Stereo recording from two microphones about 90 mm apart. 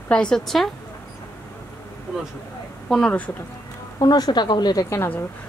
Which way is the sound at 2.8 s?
Centre (ahead or behind).